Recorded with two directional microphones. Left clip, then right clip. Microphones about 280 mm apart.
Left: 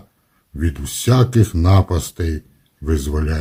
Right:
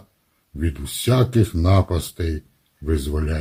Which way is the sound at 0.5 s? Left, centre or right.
Centre.